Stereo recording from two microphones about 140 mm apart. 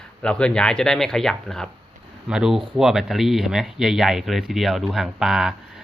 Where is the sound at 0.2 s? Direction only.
5° left (ahead or behind).